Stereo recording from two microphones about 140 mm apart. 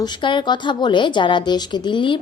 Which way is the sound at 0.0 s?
35° left (ahead or behind).